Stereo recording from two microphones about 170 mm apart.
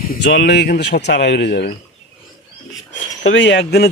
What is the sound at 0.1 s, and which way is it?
Speech, 75° left (ahead or behind).